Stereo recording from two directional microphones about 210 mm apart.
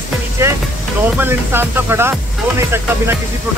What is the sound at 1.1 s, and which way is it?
Music, 10° right (ahead or behind).